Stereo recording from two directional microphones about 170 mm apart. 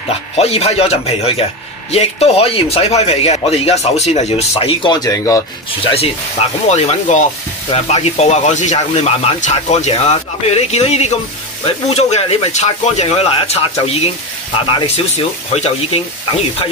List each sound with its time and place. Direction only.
0.4 s a man's voice: 35° left (ahead or behind)
5.0 s speech: 20° left (ahead or behind)
5.9 s a man's voice: 35° left (ahead or behind)
15.5 s a man's voice: 40° left (ahead or behind)